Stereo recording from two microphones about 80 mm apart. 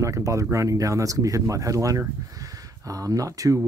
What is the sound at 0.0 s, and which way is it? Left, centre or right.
A man's voice, right.